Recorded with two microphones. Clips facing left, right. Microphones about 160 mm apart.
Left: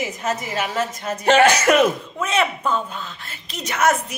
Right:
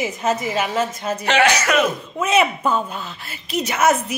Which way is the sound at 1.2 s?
45° left (ahead or behind).